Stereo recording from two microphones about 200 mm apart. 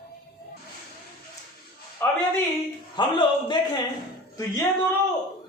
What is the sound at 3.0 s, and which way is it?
Speech, 25° left (ahead or behind).